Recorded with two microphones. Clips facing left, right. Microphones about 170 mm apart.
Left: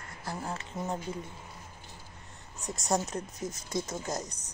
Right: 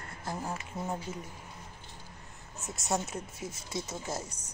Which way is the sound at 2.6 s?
Centre (ahead or behind).